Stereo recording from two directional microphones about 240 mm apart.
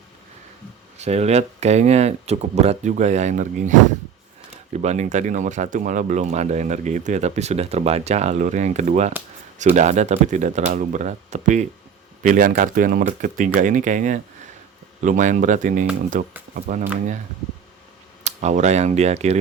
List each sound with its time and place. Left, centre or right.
0.9 s speech: right
18.2 s speech: right